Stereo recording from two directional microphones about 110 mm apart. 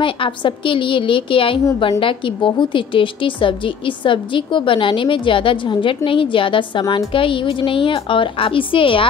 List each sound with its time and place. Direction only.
0.0 s a woman's voice: 50° left (ahead or behind)
6.8 s a woman's voice: 35° left (ahead or behind)
7.1 s a woman's voice: 50° left (ahead or behind)